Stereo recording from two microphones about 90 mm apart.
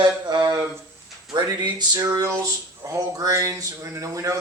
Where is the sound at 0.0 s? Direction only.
50° right (ahead or behind).